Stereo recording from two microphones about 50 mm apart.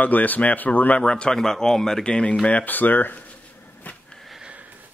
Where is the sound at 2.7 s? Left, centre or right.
Left.